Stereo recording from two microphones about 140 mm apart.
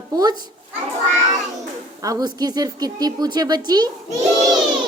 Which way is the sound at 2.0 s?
25° right (ahead or behind).